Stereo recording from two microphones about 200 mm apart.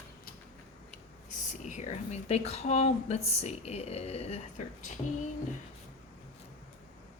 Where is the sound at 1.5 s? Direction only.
35° left (ahead or behind).